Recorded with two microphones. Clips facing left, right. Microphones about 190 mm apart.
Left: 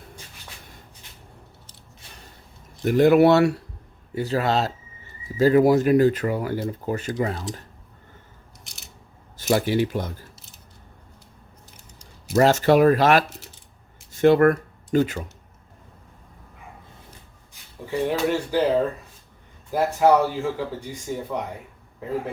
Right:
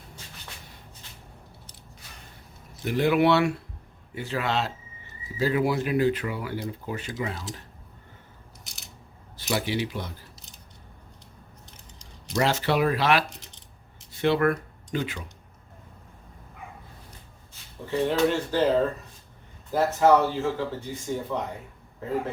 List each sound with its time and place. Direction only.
2.8 s speech: 45° left (ahead or behind)
9.4 s speech: 45° left (ahead or behind)
12.3 s speech: 45° left (ahead or behind)
17.5 s speech: 10° left (ahead or behind)
19.7 s speech: 10° left (ahead or behind)